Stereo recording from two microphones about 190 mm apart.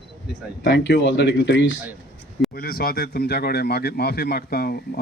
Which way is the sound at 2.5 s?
55° left (ahead or behind).